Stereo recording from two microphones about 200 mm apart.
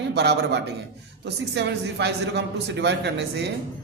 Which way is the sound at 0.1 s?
55° right (ahead or behind).